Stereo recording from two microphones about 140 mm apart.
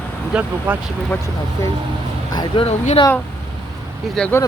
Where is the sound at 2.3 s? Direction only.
40° left (ahead or behind).